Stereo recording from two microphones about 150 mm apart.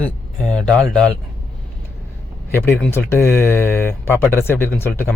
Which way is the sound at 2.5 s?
15° left (ahead or behind).